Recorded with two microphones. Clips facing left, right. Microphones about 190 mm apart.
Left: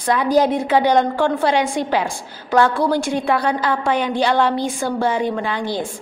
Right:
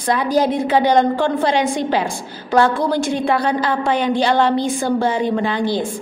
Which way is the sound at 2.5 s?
15° right (ahead or behind).